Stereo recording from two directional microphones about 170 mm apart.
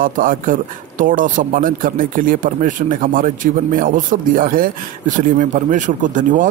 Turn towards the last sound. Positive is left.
turn(degrees=-50)  # may be behind; listen again after turning